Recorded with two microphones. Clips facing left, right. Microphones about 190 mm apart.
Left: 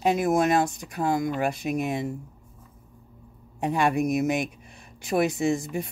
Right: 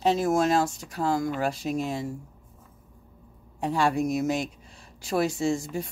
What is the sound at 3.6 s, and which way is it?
Speech, 20° left (ahead or behind).